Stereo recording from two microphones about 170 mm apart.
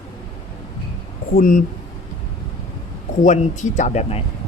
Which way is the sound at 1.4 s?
50° left (ahead or behind).